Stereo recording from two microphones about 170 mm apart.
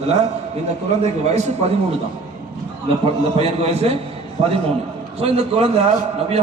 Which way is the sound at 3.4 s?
35° right (ahead or behind).